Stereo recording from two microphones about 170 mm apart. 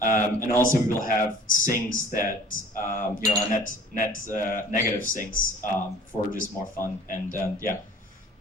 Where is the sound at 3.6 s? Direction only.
50° left (ahead or behind).